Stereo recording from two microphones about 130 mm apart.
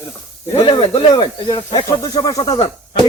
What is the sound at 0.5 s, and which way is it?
Speech, 40° left (ahead or behind).